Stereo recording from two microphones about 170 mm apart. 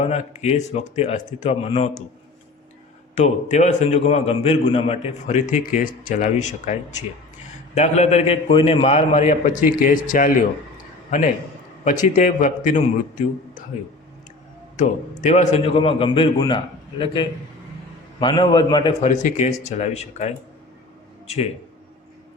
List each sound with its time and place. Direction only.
0.0 s a man's voice: 40° left (ahead or behind)
3.2 s a man's voice: 45° left (ahead or behind)
7.8 s a man's voice: 40° left (ahead or behind)
12.0 s a man's voice: 50° left (ahead or behind)
14.8 s a man's voice: 45° left (ahead or behind); by 16.6 s 30° left (ahead or behind)
18.2 s a man's voice: 25° left (ahead or behind)
19.0 s a man's voice: 45° left (ahead or behind)